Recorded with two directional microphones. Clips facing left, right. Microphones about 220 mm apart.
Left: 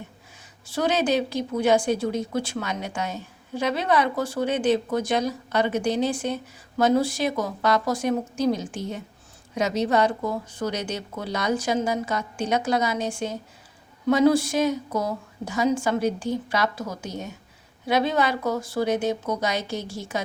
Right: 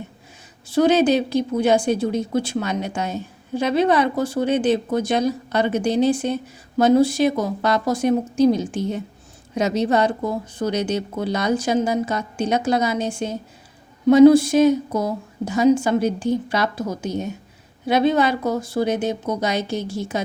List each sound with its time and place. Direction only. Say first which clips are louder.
0.7 s speech: right 7 dB; 25° right (ahead or behind)